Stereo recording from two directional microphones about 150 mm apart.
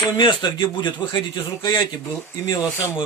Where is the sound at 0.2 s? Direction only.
35° left (ahead or behind).